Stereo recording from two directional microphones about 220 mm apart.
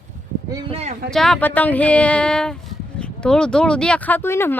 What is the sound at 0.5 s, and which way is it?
Speech, 25° right (ahead or behind).